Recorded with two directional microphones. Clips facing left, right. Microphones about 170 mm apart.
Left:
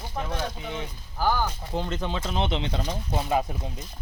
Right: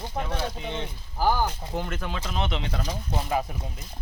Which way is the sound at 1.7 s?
20° left (ahead or behind).